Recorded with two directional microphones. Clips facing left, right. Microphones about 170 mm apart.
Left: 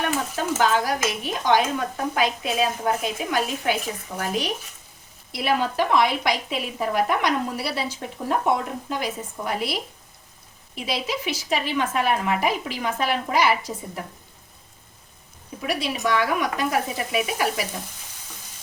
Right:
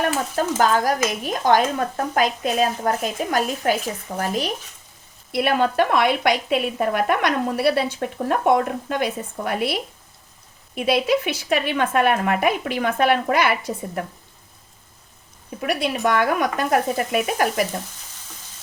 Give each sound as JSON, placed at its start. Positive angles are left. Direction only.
{"t": 0.6, "sound": "speech", "side_deg": -45}
{"t": 4.1, "sound": "speech", "side_deg": -30}
{"t": 5.3, "sound": "speech", "side_deg": -60}
{"t": 10.8, "sound": "speech", "side_deg": -60}
{"t": 15.6, "sound": "speech", "side_deg": -55}